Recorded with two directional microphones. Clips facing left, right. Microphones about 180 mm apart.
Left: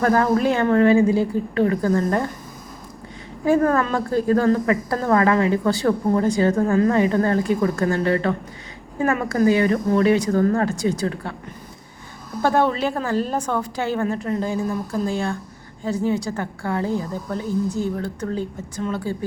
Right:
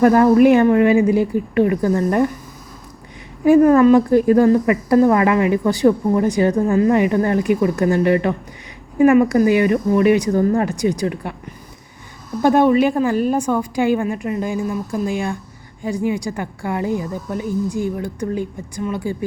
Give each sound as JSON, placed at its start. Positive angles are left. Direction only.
{"t": 0.0, "sound": "speech", "side_deg": -15}
{"t": 3.4, "sound": "speech", "side_deg": -15}
{"t": 12.4, "sound": "speech", "side_deg": -15}